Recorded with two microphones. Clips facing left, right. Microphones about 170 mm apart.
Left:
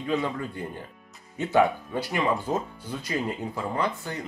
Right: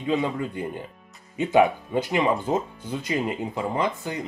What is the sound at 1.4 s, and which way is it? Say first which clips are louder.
Speech: right 3 dB; 20° right (ahead or behind).